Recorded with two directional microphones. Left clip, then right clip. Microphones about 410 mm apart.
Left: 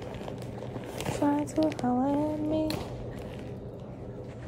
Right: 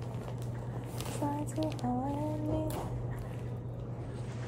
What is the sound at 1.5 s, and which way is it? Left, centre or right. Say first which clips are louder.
Speech: left 8 dB; left.